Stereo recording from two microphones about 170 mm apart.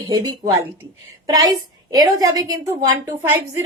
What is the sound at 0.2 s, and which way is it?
A woman's voice, 20° right (ahead or behind).